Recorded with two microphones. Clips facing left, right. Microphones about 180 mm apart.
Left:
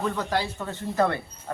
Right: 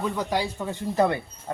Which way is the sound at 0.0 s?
10° right (ahead or behind).